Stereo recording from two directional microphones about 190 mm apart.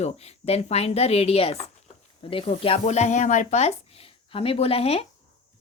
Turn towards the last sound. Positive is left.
turn(degrees=30)  # may be behind; listen again after turning